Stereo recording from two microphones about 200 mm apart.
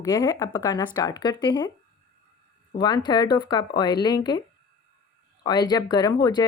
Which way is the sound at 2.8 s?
20° left (ahead or behind).